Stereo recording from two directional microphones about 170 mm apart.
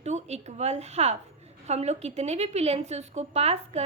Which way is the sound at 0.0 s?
40° right (ahead or behind).